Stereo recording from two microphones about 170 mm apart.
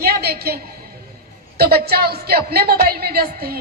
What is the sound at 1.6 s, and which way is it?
A woman's voice, 65° right (ahead or behind).